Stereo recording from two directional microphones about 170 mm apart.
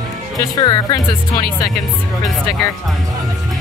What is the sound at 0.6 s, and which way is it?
Speech, 25° left (ahead or behind).